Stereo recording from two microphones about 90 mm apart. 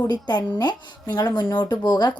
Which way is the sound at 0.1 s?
50° left (ahead or behind).